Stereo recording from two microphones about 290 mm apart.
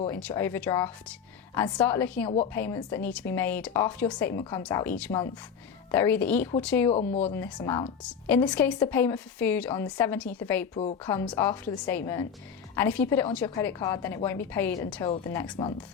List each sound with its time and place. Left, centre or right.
0.0 s a woman's voice: centre
6.9 s speech: left
7.3 s a woman's voice: centre
7.7 s speech: centre
8.3 s a woman's voice: centre